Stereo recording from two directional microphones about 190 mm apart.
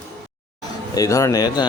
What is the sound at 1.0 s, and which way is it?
Speech, 15° left (ahead or behind).